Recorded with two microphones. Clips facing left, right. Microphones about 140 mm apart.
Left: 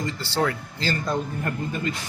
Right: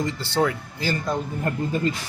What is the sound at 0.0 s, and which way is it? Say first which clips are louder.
Speech: right 2 dB; 20° right (ahead or behind).